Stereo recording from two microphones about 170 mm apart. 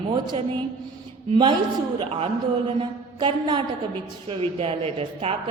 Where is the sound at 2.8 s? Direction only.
25° right (ahead or behind).